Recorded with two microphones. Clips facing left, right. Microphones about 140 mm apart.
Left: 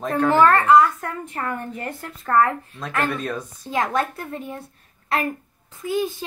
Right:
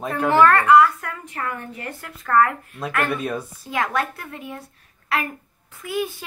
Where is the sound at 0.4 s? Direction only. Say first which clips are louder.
Right 1 dB; 35° left (ahead or behind).